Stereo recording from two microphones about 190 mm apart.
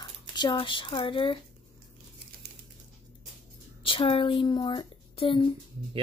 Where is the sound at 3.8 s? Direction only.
30° left (ahead or behind).